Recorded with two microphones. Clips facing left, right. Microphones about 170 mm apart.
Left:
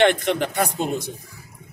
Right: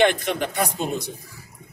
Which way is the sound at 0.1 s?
55° left (ahead or behind).